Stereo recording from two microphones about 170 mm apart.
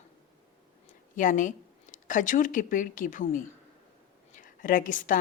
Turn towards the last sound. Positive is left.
turn(degrees=50)  # may be behind; listen again after turning